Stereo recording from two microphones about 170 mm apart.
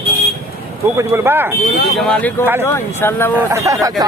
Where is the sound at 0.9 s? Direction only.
15° right (ahead or behind).